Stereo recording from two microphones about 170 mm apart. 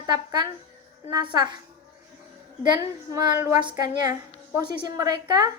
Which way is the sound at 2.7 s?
20° right (ahead or behind).